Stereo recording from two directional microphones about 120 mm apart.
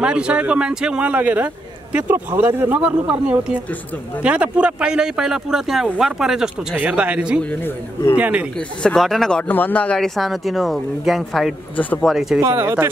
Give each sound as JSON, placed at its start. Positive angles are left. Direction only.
{"t": 0.0, "sound": "a man's voice", "side_deg": -10}
{"t": 7.6, "sound": "speech", "side_deg": 25}
{"t": 8.2, "sound": "a man's voice", "side_deg": -10}
{"t": 8.5, "sound": "speech", "side_deg": 5}
{"t": 9.5, "sound": "speech", "side_deg": 15}
{"t": 11.7, "sound": "speech", "side_deg": 15}
{"t": 12.1, "sound": "speech", "side_deg": -5}
{"t": 12.4, "sound": "speech", "side_deg": -20}